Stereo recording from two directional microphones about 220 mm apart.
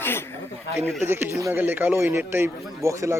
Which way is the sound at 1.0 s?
10° right (ahead or behind).